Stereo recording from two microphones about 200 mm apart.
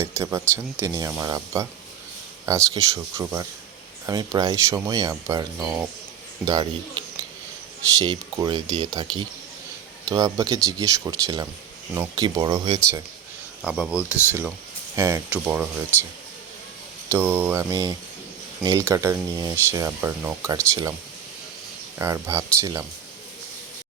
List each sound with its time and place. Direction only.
0.0 s speech: 15° right (ahead or behind)
5.5 s speech: 10° right (ahead or behind)
6.4 s speech: 20° right (ahead or behind)
13.6 s speech: 5° right (ahead or behind)
17.1 s speech: 10° right (ahead or behind)
21.9 s speech: 15° right (ahead or behind)